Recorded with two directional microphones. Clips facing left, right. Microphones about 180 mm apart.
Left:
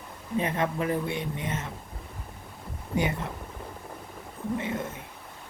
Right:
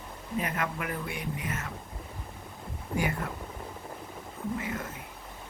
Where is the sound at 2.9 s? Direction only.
25° left (ahead or behind).